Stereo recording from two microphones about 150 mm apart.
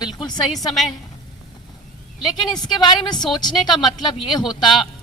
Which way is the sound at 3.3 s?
30° left (ahead or behind).